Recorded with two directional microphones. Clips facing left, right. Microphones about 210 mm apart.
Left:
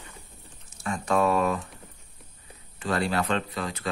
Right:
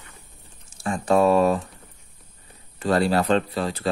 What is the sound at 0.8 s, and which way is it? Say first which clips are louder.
Speech: right 5 dB; 35° right (ahead or behind).